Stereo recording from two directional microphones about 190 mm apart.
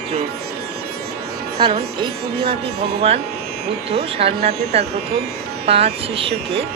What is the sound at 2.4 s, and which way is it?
Speech, 55° right (ahead or behind).